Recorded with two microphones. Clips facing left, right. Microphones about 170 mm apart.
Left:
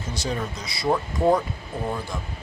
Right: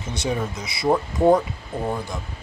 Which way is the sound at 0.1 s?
20° right (ahead or behind).